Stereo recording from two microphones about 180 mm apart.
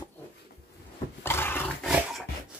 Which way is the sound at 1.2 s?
10° left (ahead or behind).